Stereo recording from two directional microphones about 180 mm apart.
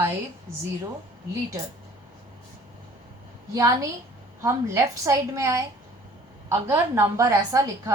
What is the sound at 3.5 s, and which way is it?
A woman's voice, 15° right (ahead or behind).